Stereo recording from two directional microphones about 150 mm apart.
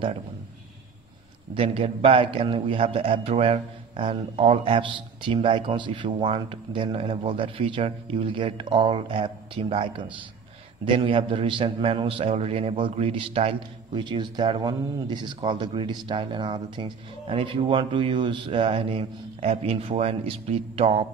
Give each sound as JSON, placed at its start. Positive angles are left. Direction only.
{"t": 1.5, "sound": "a man's voice", "side_deg": -35}